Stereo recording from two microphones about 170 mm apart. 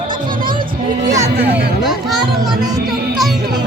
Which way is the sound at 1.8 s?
Centre (ahead or behind).